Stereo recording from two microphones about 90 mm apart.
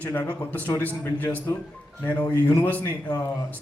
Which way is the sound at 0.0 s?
20° left (ahead or behind).